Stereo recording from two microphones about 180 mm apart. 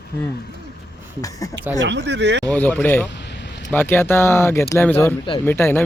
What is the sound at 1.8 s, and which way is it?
Speech, 80° right.